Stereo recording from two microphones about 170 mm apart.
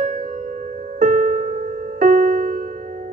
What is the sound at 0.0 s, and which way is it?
Music, 50° right (ahead or behind).